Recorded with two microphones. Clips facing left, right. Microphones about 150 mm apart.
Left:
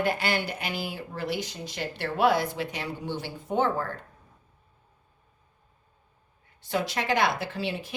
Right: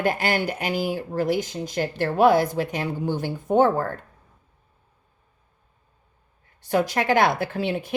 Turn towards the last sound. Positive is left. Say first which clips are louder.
# right 6 dB
turn(degrees=-55)  # may be behind; listen again after turning